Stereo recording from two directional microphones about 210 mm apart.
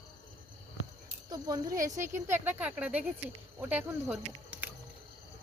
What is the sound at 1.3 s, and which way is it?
Speech, 20° right (ahead or behind).